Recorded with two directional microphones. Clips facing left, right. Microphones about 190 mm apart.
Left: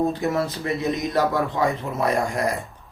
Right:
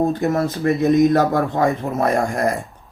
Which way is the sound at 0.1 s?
50° right (ahead or behind).